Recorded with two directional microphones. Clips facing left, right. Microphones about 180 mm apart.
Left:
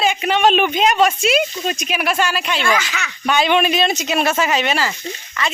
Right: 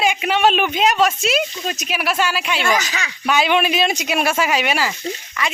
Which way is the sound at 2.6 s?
40° right (ahead or behind).